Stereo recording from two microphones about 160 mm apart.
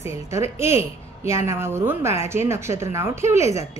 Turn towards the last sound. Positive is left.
turn(degrees=-20)  # may be behind; listen again after turning